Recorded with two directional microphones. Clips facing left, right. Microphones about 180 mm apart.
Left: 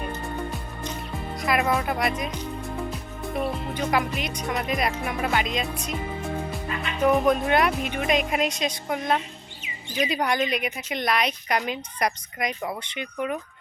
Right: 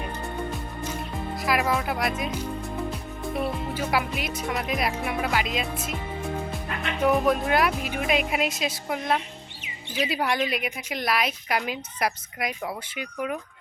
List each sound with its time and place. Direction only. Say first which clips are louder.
1.4 s a woman's voice: left 1 dB; centre (ahead or behind)
7.1 s a woman's voice: left 2 dB; centre (ahead or behind)